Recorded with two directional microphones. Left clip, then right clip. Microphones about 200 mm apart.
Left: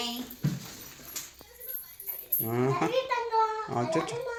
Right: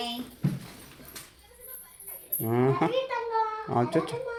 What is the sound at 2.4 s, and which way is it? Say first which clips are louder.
Speech: right 3 dB; 20° right (ahead or behind).